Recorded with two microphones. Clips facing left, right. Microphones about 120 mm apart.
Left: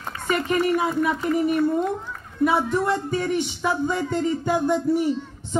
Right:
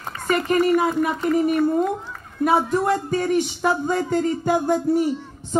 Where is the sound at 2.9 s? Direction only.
40° right (ahead or behind).